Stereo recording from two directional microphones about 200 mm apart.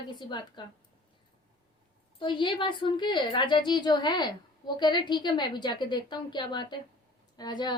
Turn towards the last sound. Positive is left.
turn(degrees=20)  # may be behind; listen again after turning